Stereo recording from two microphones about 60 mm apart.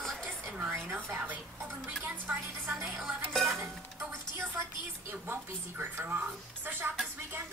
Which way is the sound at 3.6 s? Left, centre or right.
Right.